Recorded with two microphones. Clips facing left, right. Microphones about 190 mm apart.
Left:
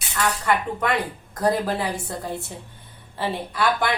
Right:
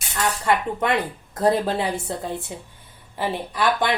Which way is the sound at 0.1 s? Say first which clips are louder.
Right 1 dB; 25° right (ahead or behind).